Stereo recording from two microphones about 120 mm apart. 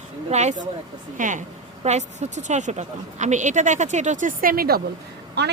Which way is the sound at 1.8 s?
75° right (ahead or behind).